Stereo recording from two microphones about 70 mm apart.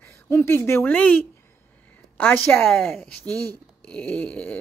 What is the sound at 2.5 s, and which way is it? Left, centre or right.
Speech, left.